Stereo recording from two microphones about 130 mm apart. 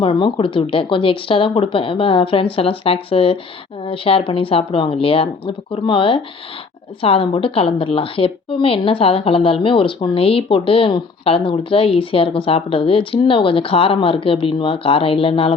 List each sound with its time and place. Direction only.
0.0 s a woman's voice: 40° left (ahead or behind)